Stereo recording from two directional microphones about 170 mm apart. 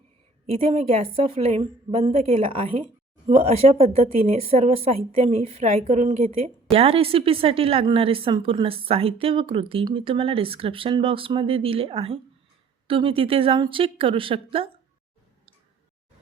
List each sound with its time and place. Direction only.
0.5 s speech: 35° right (ahead or behind)